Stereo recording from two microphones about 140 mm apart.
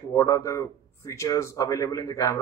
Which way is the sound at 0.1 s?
20° left (ahead or behind).